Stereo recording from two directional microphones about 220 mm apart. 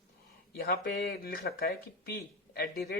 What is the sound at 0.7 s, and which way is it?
Speech, 45° left (ahead or behind).